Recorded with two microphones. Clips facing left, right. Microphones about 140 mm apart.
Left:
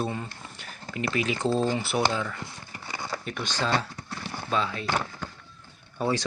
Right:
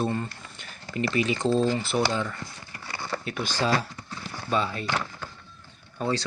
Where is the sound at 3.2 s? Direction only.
5° right (ahead or behind).